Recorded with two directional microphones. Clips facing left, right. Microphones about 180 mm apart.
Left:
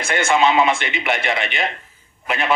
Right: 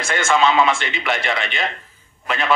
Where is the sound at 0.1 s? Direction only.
15° left (ahead or behind).